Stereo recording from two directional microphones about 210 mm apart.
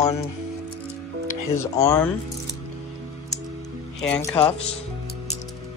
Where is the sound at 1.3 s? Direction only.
15° left (ahead or behind).